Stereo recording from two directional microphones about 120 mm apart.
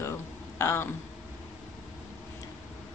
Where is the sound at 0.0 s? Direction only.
25° left (ahead or behind).